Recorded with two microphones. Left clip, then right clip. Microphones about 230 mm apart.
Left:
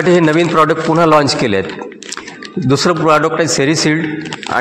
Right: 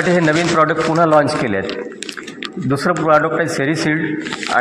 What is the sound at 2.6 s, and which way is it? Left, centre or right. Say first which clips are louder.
A man's voice: left 3 dB; left.